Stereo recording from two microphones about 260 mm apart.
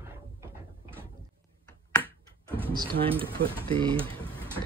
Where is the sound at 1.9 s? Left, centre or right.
Centre.